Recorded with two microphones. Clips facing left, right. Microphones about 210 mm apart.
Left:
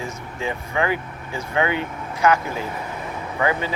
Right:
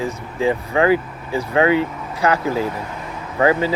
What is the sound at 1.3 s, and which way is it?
Speech, 35° right (ahead or behind).